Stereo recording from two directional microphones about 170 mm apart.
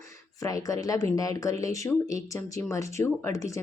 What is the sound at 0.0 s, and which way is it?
Speech, 20° left (ahead or behind).